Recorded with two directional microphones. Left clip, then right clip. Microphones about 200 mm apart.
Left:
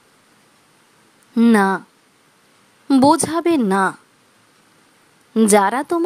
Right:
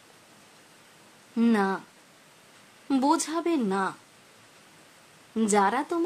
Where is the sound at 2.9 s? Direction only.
45° left (ahead or behind).